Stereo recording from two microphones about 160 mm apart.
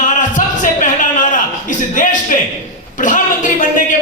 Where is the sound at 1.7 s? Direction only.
55° left (ahead or behind).